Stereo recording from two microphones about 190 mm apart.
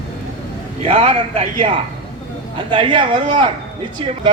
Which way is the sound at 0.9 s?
35° right (ahead or behind).